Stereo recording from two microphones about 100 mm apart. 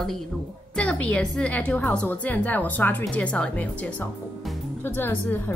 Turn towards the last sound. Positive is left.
turn(degrees=20)  # may be behind; listen again after turning